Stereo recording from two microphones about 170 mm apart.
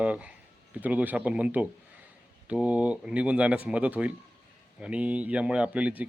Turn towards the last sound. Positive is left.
turn(degrees=-10)  # may be behind; listen again after turning